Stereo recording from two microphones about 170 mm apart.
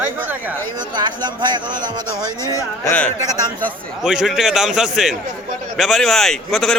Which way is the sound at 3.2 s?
20° right (ahead or behind).